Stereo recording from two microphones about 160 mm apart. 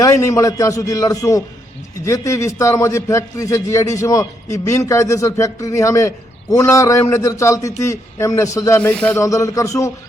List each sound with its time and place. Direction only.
0.0 s a man's voice: 20° left (ahead or behind)
8.9 s a sound: 5° left (ahead or behind)
9.2 s a man's voice: 20° left (ahead or behind)